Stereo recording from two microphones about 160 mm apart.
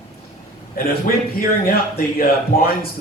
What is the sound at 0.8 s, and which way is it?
A man's voice, 65° left (ahead or behind).